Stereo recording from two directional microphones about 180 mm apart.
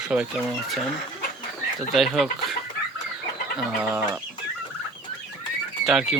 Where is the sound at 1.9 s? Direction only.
Centre (ahead or behind).